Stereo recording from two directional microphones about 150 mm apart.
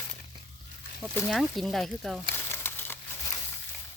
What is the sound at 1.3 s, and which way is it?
Speech, centre (ahead or behind).